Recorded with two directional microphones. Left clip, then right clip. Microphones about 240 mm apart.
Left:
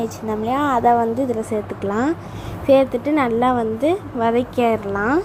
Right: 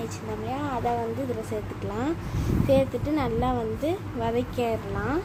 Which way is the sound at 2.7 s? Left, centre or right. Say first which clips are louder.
Left 9 dB; left.